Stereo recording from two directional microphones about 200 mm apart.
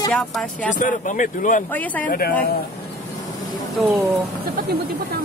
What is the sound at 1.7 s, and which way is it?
Speech, 10° left (ahead or behind).